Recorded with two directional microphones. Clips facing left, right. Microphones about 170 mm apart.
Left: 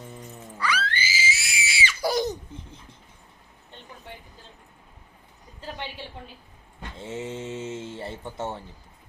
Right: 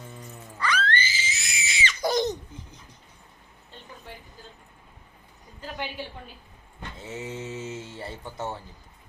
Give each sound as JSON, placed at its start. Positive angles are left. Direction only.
{"t": 0.6, "sound": "screaming", "side_deg": 10}
{"t": 7.0, "sound": "speech", "side_deg": 25}